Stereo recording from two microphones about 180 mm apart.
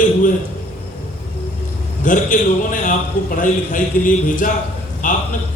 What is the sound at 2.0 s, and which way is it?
A man's voice, 45° left (ahead or behind).